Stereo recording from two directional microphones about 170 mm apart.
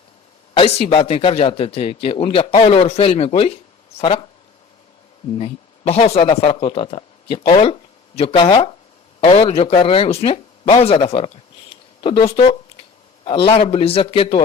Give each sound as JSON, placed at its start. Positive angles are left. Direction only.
{"t": 0.5, "sound": "speech", "side_deg": 35}
{"t": 5.4, "sound": "speech", "side_deg": 35}